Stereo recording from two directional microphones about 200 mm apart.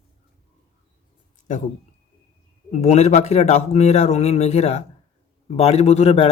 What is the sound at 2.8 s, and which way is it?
Speech, 35° left (ahead or behind).